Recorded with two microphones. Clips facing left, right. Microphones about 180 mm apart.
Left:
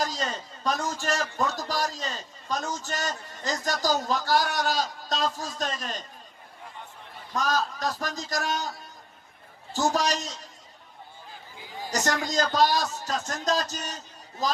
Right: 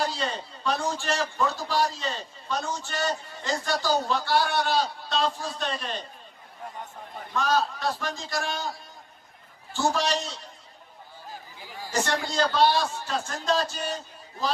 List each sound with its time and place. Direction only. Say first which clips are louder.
0.0 s a sound: right 1 dB; 40° left (ahead or behind)
0.6 s a man's voice: right 1 dB; 40° left (ahead or behind)
7.3 s a man's voice: right 2 dB; 40° left (ahead or behind)
9.7 s a man's voice: even; 40° left (ahead or behind)
11.9 s a man's voice: even; 40° left (ahead or behind)